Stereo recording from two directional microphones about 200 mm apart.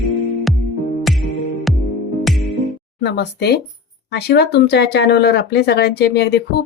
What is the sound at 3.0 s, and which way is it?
Speech, 55° left (ahead or behind).